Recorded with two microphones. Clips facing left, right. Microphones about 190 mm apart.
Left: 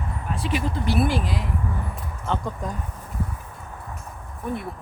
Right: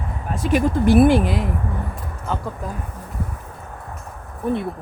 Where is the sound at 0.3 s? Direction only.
45° right (ahead or behind).